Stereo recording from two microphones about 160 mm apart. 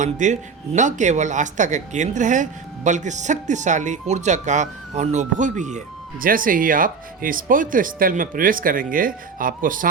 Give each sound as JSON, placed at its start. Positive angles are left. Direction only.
{"t": 0.0, "sound": "speech", "side_deg": -50}